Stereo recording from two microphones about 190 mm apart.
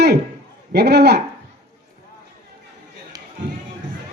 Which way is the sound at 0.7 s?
60° right (ahead or behind).